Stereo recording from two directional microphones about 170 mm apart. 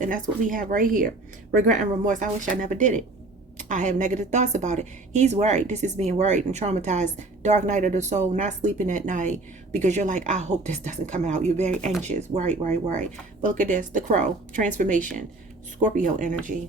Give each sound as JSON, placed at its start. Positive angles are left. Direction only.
{"t": 0.0, "sound": "a woman's voice", "side_deg": -50}